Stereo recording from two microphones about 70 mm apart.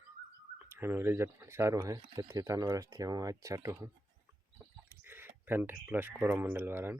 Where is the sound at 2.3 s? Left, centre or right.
Right.